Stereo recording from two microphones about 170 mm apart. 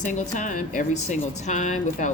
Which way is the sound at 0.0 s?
45° left (ahead or behind).